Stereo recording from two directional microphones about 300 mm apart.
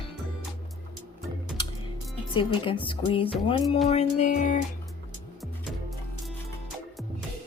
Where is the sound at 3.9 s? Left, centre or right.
Left.